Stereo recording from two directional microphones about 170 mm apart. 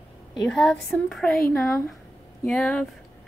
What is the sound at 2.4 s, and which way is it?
Speech, 5° left (ahead or behind).